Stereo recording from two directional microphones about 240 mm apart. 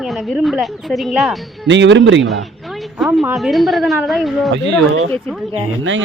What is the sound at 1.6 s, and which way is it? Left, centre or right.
Speech, right.